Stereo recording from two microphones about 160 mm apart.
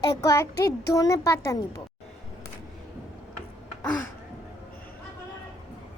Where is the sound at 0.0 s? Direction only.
20° left (ahead or behind).